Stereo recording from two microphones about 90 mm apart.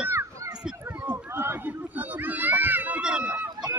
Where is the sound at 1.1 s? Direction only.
30° right (ahead or behind); by 3.4 s 10° right (ahead or behind).